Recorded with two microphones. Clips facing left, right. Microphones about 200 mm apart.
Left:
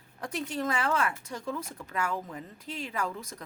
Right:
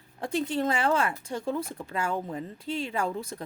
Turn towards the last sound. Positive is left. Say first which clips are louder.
# right 4 dB
turn(degrees=-30)  # may be behind; listen again after turning